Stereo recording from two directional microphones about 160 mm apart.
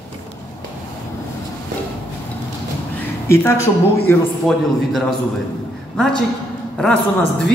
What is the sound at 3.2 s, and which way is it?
Speech, 15° left (ahead or behind).